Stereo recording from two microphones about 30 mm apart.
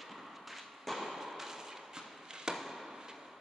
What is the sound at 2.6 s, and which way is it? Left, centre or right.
Chop, centre.